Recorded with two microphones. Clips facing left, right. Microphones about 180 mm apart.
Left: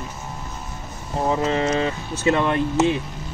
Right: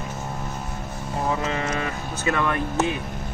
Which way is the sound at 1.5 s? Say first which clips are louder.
Left 6 dB; 30° left (ahead or behind).